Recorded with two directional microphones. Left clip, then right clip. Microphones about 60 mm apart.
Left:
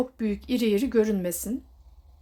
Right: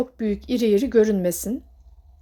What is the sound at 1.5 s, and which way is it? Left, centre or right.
Speech, right.